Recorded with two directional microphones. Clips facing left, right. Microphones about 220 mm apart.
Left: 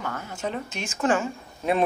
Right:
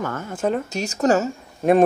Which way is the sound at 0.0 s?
50° right (ahead or behind).